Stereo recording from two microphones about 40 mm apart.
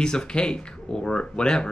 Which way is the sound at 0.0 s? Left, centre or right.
Centre.